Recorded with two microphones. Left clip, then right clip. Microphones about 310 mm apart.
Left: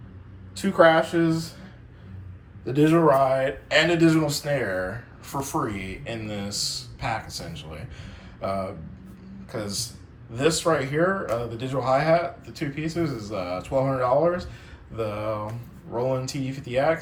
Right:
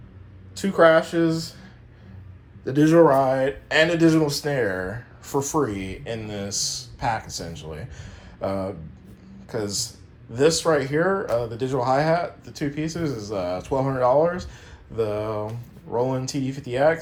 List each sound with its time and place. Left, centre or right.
0.5 s speech: centre
2.6 s speech: centre
3.8 s speech: right
4.9 s speech: centre
10.6 s speech: right
11.5 s speech: centre